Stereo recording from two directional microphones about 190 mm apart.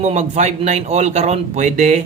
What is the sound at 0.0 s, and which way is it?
Speech, 35° right (ahead or behind).